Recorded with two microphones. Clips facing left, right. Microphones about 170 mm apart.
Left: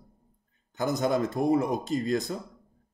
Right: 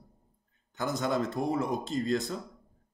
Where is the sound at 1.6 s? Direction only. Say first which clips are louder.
Left 3 dB; 15° left (ahead or behind).